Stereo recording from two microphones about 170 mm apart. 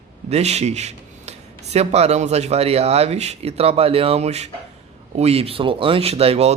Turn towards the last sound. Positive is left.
turn(degrees=-35)  # may be behind; listen again after turning